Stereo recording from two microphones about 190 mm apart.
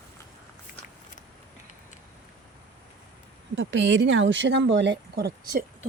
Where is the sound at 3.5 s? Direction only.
70° right (ahead or behind).